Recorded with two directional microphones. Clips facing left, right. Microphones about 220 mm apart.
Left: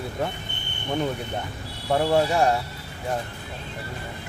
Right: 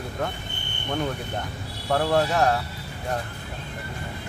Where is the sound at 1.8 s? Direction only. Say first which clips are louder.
Left 1 dB; 10° left (ahead or behind).